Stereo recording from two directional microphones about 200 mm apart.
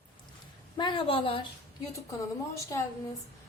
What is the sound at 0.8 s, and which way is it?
Speech, 25° left (ahead or behind).